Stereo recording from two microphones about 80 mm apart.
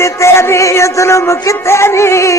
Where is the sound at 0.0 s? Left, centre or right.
Left.